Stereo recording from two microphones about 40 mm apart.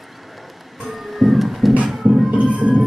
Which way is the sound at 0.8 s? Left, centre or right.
Centre.